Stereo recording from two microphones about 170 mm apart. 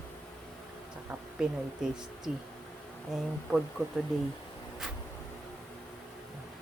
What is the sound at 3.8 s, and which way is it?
Speech, 15° right (ahead or behind).